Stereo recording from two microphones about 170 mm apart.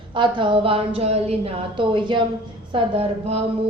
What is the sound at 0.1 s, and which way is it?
A woman's voice, 30° right (ahead or behind).